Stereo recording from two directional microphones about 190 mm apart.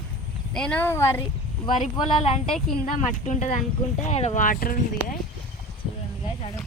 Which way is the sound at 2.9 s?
40° left (ahead or behind).